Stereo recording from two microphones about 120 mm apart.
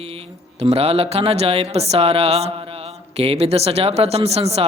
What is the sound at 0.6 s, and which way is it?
Speech, 55° right (ahead or behind).